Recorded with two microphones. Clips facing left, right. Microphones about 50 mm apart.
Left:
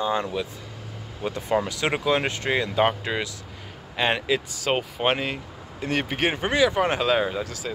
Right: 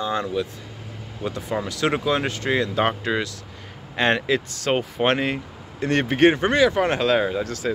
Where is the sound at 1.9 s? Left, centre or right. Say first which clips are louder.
Left 1 dB; centre.